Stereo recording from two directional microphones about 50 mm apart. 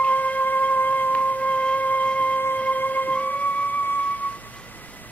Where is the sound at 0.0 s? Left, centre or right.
Left.